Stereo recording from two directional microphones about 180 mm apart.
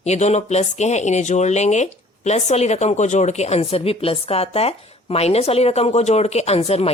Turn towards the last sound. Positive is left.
turn(degrees=35)  # may be behind; listen again after turning